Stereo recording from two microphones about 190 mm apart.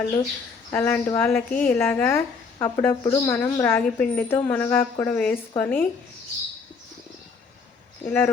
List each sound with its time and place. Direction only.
0.7 s speech: 10° left (ahead or behind)
8.0 s speech: 10° left (ahead or behind)